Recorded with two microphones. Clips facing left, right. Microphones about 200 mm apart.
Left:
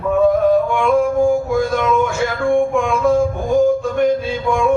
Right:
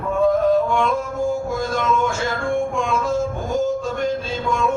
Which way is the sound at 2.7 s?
55° left (ahead or behind).